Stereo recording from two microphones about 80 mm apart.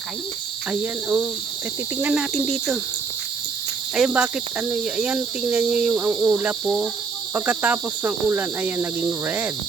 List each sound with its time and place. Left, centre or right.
0.7 s speech: centre
2.1 s cricket: centre
3.9 s speech: centre